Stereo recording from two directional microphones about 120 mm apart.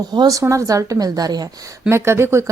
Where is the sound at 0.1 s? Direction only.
30° right (ahead or behind).